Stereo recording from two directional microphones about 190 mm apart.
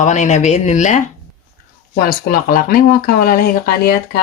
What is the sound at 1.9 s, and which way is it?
Speech, 50° left (ahead or behind).